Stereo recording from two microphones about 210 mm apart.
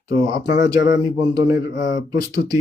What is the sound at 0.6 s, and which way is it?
Speech, 15° right (ahead or behind).